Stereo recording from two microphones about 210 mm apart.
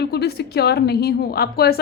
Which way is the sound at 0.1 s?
50° left (ahead or behind).